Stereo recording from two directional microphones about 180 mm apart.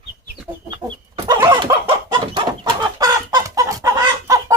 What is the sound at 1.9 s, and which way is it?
Chicken, 25° right (ahead or behind).